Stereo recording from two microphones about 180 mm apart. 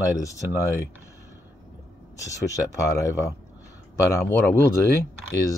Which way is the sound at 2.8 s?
20° left (ahead or behind).